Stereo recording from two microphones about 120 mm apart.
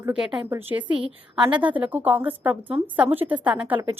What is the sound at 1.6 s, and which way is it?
A woman's voice, 15° right (ahead or behind).